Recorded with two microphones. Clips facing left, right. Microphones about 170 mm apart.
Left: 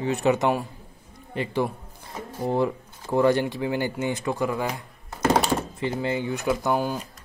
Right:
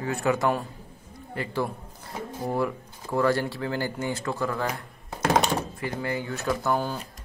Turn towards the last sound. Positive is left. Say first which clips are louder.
# left 2 dB
turn(degrees=15)  # may be behind; listen again after turning